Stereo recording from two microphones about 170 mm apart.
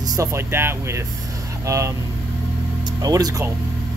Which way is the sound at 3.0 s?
20° right (ahead or behind).